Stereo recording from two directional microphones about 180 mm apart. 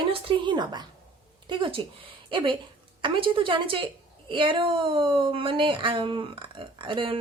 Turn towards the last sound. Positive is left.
turn(degrees=-30)  # may be behind; listen again after turning